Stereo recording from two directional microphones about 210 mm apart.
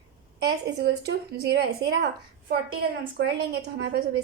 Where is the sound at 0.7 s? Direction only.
50° right (ahead or behind).